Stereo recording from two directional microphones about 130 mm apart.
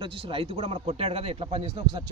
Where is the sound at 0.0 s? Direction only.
40° right (ahead or behind).